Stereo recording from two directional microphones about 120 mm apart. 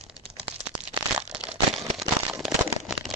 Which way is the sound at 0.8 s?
10° right (ahead or behind).